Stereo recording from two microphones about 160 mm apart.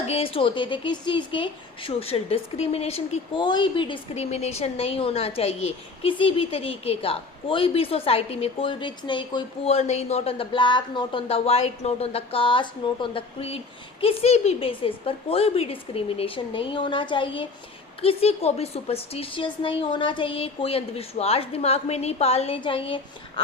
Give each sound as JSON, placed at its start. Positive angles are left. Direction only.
{"t": 0.1, "sound": "speech", "side_deg": 35}